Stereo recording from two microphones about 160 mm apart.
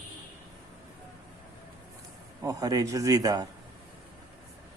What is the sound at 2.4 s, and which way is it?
A man's voice, 20° right (ahead or behind).